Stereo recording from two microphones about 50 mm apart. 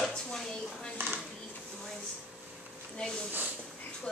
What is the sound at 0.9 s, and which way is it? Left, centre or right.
Dishes, right.